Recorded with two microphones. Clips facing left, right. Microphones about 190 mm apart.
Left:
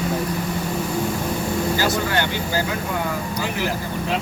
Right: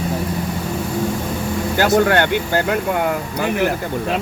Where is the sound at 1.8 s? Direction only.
60° right (ahead or behind).